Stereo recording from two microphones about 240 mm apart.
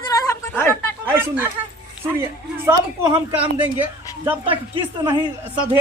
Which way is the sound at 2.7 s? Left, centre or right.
Centre.